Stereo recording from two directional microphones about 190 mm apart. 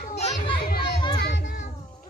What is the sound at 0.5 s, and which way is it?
Music, 55° left (ahead or behind).